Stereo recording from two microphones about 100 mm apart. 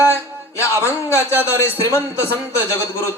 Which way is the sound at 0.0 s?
30° left (ahead or behind).